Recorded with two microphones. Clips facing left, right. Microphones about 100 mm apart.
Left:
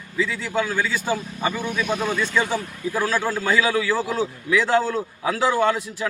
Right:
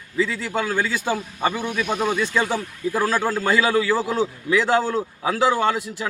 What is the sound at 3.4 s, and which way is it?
A man's voice, 35° right (ahead or behind).